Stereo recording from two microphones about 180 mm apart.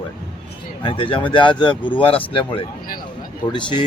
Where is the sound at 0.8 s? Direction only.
30° left (ahead or behind).